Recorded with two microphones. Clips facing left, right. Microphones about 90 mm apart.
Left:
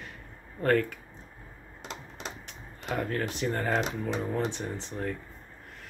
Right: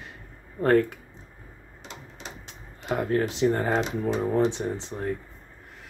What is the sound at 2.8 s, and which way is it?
Speech, 25° right (ahead or behind).